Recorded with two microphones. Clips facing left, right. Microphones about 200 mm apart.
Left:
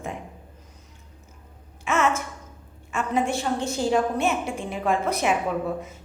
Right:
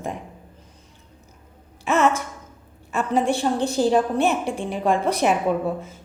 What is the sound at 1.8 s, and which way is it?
A woman's voice, 35° right (ahead or behind).